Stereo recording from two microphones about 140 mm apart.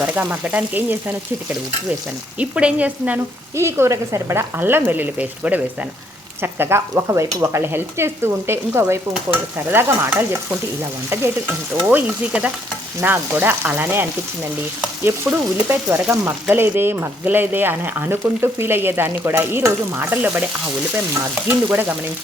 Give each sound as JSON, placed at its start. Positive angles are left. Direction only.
{"t": 0.0, "sound": "frying", "side_deg": -10}
{"t": 2.4, "sound": "frying", "side_deg": -10}
{"t": 21.4, "sound": "frying", "side_deg": -15}